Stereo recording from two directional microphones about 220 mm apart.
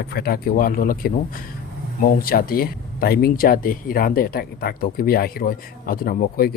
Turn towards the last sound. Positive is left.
turn(degrees=45)  # may be behind; listen again after turning